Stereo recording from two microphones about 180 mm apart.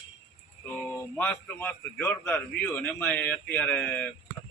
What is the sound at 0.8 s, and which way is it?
A man's voice, 5° left (ahead or behind).